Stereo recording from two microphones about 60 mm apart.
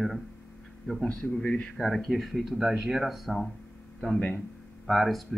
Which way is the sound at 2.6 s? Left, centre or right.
Centre.